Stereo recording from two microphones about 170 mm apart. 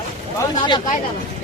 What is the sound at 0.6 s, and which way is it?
Speech, 25° left (ahead or behind).